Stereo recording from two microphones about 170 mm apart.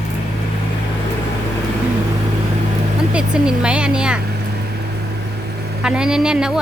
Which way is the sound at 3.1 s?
5° right (ahead or behind).